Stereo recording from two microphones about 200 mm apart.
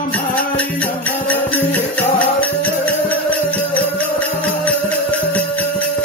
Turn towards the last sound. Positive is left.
turn(degrees=10)  # may be behind; listen again after turning